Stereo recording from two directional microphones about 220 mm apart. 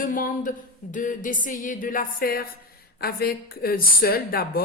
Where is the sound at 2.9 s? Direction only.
45° left (ahead or behind).